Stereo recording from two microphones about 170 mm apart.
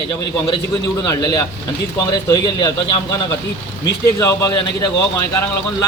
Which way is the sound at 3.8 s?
20° left (ahead or behind).